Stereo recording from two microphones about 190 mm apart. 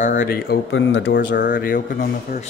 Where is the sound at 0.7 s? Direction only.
75° left (ahead or behind).